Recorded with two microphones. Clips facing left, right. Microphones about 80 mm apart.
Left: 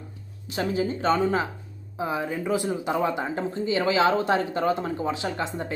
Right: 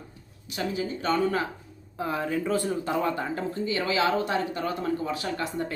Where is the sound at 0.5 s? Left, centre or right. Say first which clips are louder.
Left 4 dB; left.